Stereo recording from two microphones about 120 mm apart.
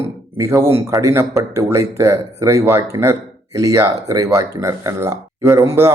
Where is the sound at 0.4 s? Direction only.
20° right (ahead or behind).